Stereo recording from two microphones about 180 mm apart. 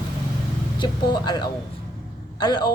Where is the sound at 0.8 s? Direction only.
25° left (ahead or behind).